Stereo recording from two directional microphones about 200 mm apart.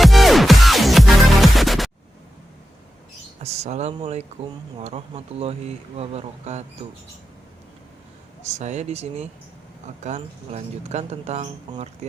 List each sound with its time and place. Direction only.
0.0 s music: centre (ahead or behind)
3.4 s speech: 35° right (ahead or behind)
8.4 s speech: 35° right (ahead or behind)